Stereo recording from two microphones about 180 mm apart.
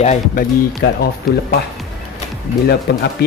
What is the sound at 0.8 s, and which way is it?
Speech, 65° left (ahead or behind).